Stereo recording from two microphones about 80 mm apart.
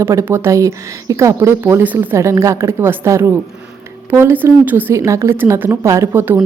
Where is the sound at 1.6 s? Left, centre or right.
Right.